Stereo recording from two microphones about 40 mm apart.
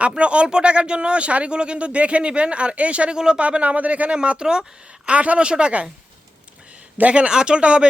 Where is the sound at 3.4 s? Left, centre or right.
Right.